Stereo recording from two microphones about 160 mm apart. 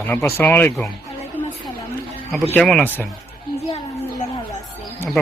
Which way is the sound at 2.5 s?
5° left (ahead or behind).